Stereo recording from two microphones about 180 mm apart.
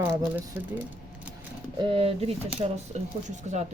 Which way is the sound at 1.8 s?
30° right (ahead or behind).